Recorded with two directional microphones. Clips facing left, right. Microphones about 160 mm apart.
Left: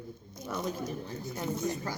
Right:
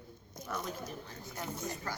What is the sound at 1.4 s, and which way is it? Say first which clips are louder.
Speech: left 7 dB; 15° left (ahead or behind).